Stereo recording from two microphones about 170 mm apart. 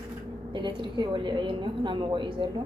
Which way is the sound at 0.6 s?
25° right (ahead or behind).